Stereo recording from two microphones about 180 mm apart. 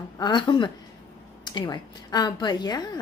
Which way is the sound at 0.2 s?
25° left (ahead or behind).